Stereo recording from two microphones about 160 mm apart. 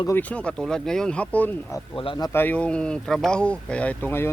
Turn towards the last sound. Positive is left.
turn(degrees=10)  # may be behind; listen again after turning